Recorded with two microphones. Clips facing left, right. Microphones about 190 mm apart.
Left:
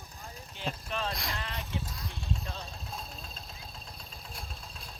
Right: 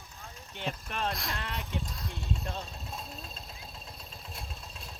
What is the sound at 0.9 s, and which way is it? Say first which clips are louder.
Sheep: right 1 dB; 55° right (ahead or behind).